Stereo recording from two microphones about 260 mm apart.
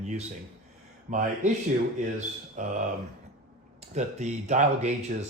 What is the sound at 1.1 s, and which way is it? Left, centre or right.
Speech, right.